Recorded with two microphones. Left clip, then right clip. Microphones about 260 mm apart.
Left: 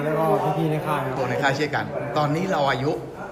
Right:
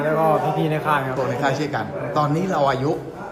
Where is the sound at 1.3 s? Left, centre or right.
Centre.